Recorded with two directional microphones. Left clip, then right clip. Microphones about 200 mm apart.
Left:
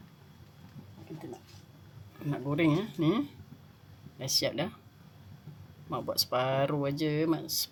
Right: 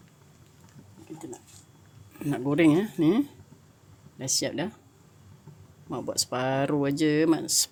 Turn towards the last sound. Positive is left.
turn(degrees=-45)  # may be behind; listen again after turning